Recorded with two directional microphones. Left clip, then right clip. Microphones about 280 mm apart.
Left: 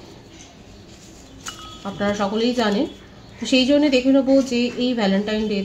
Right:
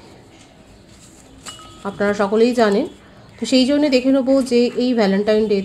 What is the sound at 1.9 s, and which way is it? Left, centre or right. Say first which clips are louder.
A woman's voice: right 6 dB; right.